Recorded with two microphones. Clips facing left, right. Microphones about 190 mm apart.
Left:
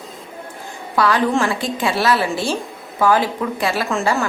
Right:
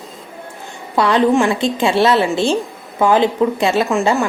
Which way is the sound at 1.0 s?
25° right (ahead or behind).